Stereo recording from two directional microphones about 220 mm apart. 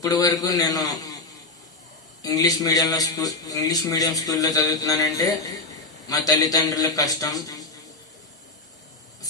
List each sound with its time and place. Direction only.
0.0 s a man's voice: 15° left (ahead or behind)
2.2 s a man's voice: 15° left (ahead or behind)